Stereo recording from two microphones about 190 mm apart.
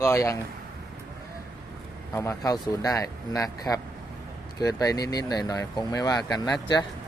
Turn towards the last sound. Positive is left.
turn(degrees=25)  # may be behind; listen again after turning